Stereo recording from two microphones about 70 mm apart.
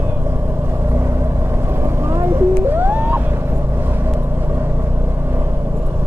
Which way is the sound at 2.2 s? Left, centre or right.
Right.